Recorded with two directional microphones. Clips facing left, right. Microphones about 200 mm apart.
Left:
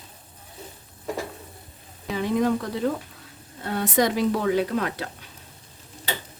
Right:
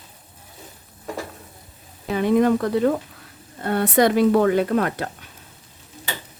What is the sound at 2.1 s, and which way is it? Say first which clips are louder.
Speech: right 5 dB; 60° right (ahead or behind).